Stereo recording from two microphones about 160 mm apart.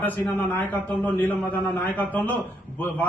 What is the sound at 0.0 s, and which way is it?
A man's voice, 10° left (ahead or behind).